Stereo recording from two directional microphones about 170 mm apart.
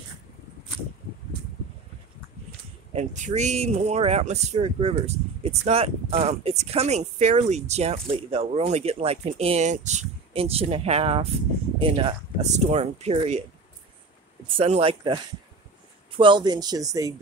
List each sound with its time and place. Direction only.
2.9 s speech: 40° right (ahead or behind)
14.6 s speech: 35° right (ahead or behind)